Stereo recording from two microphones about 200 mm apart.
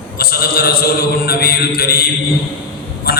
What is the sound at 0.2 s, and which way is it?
A man's voice, 50° left (ahead or behind).